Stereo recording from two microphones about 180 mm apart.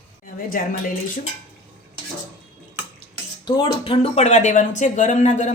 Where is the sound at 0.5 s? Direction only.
50° left (ahead or behind).